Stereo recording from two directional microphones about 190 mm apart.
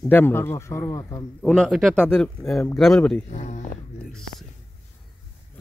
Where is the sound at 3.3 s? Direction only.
35° left (ahead or behind).